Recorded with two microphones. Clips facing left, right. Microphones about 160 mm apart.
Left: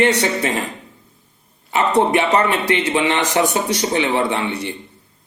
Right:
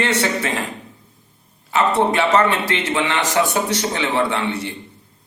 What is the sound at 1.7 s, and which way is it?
A man's voice, 20° left (ahead or behind).